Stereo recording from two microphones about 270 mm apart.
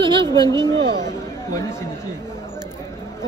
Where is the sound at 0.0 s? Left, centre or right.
Centre.